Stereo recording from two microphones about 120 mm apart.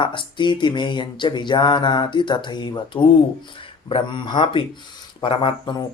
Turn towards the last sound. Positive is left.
turn(degrees=40)  # may be behind; listen again after turning